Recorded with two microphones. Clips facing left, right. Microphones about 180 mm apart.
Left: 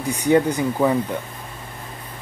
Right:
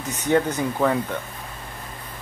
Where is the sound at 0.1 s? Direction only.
10° left (ahead or behind).